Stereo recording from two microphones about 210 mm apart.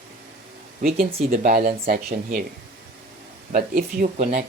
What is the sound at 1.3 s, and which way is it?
Speech, 40° right (ahead or behind).